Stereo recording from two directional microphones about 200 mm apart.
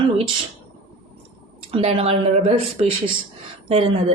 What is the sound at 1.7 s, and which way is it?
A woman's voice, 25° right (ahead or behind).